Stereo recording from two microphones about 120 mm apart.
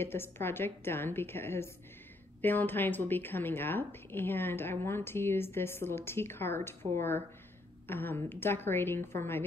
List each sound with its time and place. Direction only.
0.0 s a woman's voice: 20° left (ahead or behind)